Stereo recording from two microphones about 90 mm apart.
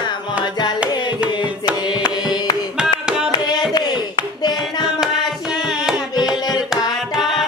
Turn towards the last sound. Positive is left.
turn(degrees=0)  # may be behind; listen again after turning